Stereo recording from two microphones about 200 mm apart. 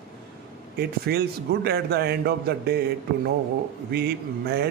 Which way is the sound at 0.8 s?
50° right (ahead or behind).